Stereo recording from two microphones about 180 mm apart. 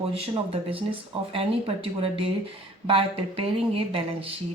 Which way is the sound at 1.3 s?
30° right (ahead or behind).